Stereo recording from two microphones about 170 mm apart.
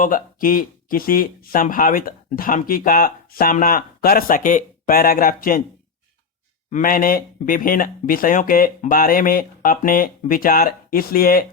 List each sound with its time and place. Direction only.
0.0 s speech: 55° left (ahead or behind)
6.7 s speech: 50° left (ahead or behind)